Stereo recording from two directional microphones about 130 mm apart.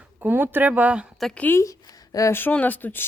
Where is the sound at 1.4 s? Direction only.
20° left (ahead or behind).